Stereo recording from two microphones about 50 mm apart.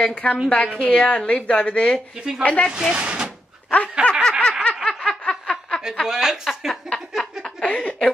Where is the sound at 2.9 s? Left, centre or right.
Right.